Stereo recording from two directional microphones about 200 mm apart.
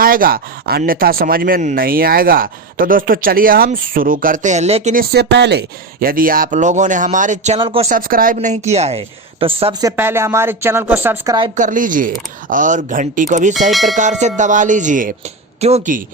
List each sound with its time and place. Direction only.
0.0 s speech: 45° right (ahead or behind)
5.1 s speech: 55° right (ahead or behind); by 7.9 s 30° right (ahead or behind)
7.9 s speech: 45° right (ahead or behind); by 9.5 s 30° right (ahead or behind)
9.8 s speech: 10° right (ahead or behind)
11.5 s speech: 40° right (ahead or behind)
13.7 s speech: centre (ahead or behind)
13.9 s speech: 35° right (ahead or behind)